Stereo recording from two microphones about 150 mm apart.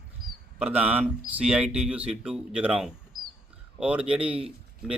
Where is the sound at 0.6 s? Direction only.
10° right (ahead or behind).